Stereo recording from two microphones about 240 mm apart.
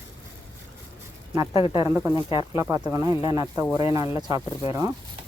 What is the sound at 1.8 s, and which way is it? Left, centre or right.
Speech, centre.